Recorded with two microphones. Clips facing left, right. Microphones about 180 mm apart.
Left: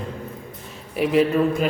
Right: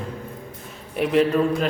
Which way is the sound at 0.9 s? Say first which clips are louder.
Even; centre (ahead or behind).